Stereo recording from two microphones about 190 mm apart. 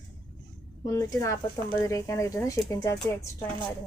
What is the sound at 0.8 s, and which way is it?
Speech, 15° left (ahead or behind).